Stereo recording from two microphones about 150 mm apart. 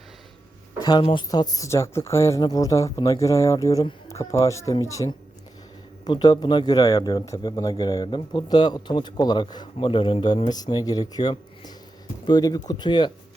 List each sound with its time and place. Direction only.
0.8 s speech: 30° left (ahead or behind)